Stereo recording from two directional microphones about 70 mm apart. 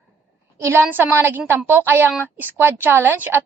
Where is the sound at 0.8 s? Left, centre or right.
Right.